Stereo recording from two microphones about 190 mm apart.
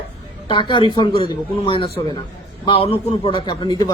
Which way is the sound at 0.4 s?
25° left (ahead or behind).